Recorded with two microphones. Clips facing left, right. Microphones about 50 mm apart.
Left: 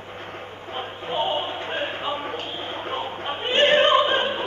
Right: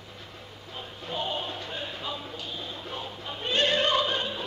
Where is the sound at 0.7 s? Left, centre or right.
Left.